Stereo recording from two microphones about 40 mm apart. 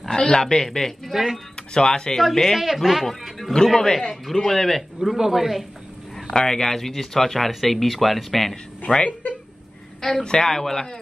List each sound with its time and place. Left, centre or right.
0.1 s speech: left
0.4 s a man's voice: centre
1.1 s speech: centre
1.7 s speech: centre
2.3 s a man's voice: centre
2.8 s speech: centre
3.6 s a man's voice: centre
5.1 s speech: centre
6.3 s speech: centre
8.9 s speech: left
10.0 s a man's voice: left